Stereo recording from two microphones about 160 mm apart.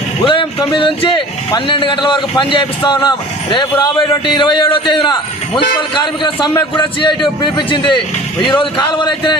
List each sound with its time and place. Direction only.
0.3 s a man's voice: 30° left (ahead or behind)